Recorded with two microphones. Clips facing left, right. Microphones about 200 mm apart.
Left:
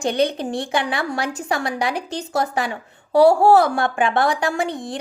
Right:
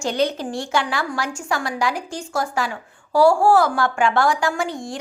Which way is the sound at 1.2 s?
20° left (ahead or behind).